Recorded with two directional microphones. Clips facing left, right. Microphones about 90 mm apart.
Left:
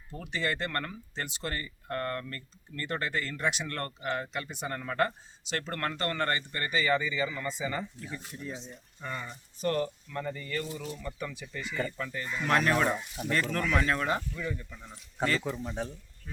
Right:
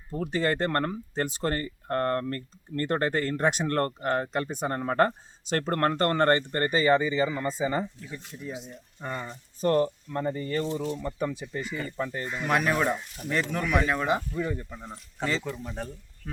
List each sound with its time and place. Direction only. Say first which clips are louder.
0.1 s speech: right 6 dB; 40° right (ahead or behind)
8.4 s speech: right 5 dB; 10° right (ahead or behind)
9.0 s speech: right 4 dB; 35° right (ahead or behind)
12.5 s speech: right 1 dB; 5° right (ahead or behind)
13.4 s speech: right 4 dB; 15° right (ahead or behind)
14.2 s speech: right 5 dB; 35° right (ahead or behind)
15.4 s speech: left 1 dB; centre (ahead or behind)